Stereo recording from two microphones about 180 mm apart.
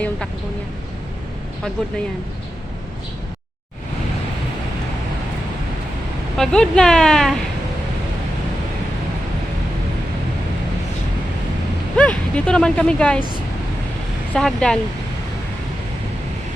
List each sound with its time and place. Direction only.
6.3 s speech: 5° left (ahead or behind)
11.9 s speech: 5° left (ahead or behind)
14.3 s speech: 5° left (ahead or behind)